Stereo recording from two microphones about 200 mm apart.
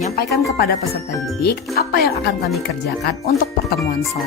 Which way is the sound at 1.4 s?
55° left (ahead or behind).